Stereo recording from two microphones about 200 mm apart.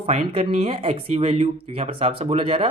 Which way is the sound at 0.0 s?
30° right (ahead or behind).